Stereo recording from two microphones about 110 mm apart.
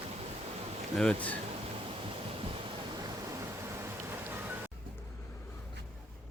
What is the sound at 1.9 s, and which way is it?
Waves, 55° right (ahead or behind).